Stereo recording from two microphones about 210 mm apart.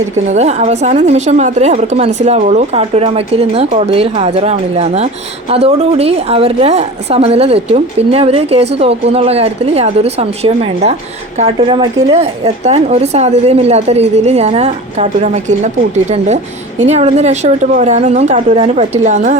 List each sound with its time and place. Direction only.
0.3 s a woman's voice: 30° right (ahead or behind)